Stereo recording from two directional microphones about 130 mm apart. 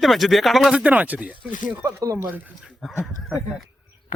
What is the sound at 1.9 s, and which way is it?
Speech, 20° right (ahead or behind).